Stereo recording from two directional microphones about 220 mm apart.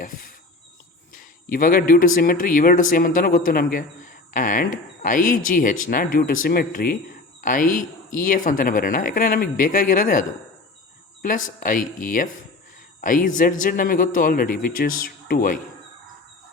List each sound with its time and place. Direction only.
0.0 s insect: 40° left (ahead or behind)
1.1 s speech: 40° left (ahead or behind)